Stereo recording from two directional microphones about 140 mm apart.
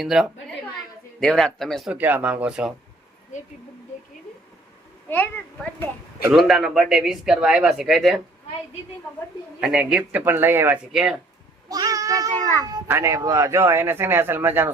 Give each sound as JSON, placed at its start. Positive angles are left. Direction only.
{"t": 0.0, "sound": "speech", "side_deg": -5}
{"t": 1.9, "sound": "speech", "side_deg": -10}
{"t": 5.0, "sound": "a child's voice", "side_deg": 10}
{"t": 6.3, "sound": "speech", "side_deg": 0}
{"t": 9.6, "sound": "speech", "side_deg": -5}
{"t": 10.9, "sound": "speech", "side_deg": -5}
{"t": 11.7, "sound": "meow", "side_deg": -25}
{"t": 12.9, "sound": "speech", "side_deg": -20}